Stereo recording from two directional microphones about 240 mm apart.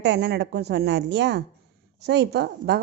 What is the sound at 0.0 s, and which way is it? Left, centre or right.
A woman's voice, right.